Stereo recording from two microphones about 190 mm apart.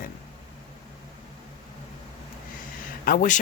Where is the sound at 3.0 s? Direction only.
45° left (ahead or behind).